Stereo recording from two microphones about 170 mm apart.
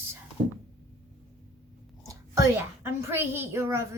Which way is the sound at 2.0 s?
20° right (ahead or behind).